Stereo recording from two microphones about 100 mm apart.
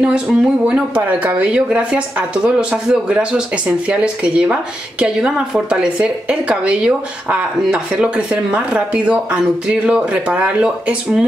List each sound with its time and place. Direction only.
0.0 s speech: 5° right (ahead or behind)